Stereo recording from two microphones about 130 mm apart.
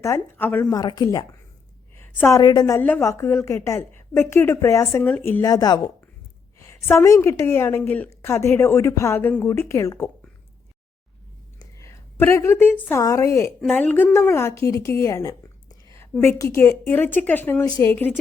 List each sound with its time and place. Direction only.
0.0 s a woman's voice: 15° left (ahead or behind)
0.7 s a woman's voice: 30° left (ahead or behind)
2.7 s a woman's voice: 15° left (ahead or behind); by 5.9 s 30° left (ahead or behind)
6.6 s a woman's voice: 20° left (ahead or behind)
11.6 s a sound: 20° left (ahead or behind)
12.9 s a woman's voice: 25° left (ahead or behind)
13.7 s a woman's voice: 10° left (ahead or behind)